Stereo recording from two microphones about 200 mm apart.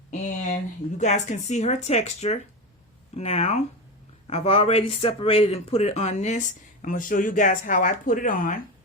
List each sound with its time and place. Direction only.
0.1 s speech: 40° left (ahead or behind)